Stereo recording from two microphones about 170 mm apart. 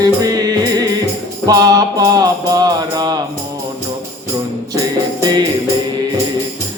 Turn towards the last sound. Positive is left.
turn(degrees=-25)  # may be behind; listen again after turning